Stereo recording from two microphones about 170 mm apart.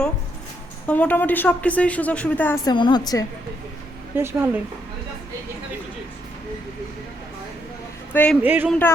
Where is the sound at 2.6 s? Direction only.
25° left (ahead or behind).